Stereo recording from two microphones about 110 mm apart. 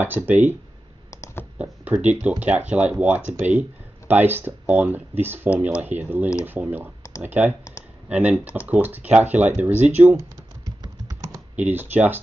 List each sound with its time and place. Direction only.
0.0 s speech: 15° right (ahead or behind)
1.6 s speech: 15° right (ahead or behind)
10.1 s computer keyboard: 35° right (ahead or behind)
11.5 s speech: 15° right (ahead or behind)